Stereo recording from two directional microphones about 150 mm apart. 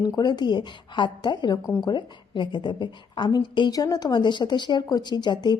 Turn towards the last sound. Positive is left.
turn(degrees=30)  # may be behind; listen again after turning